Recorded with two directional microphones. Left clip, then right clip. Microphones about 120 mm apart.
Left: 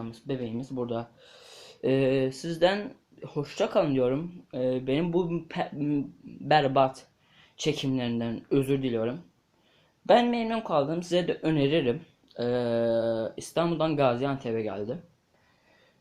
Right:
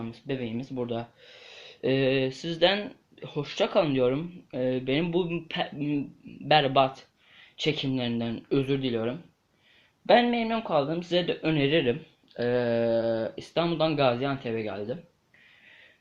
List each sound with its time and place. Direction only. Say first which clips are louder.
0.0 s speech: right 1 dB; centre (ahead or behind)
5.5 s speech: even; 15° left (ahead or behind)